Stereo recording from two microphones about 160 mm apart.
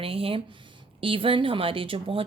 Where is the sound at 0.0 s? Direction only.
35° right (ahead or behind).